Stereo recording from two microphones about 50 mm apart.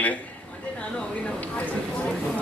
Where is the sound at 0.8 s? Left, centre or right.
Left.